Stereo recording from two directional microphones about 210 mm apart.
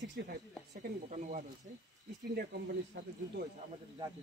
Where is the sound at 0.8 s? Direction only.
35° right (ahead or behind).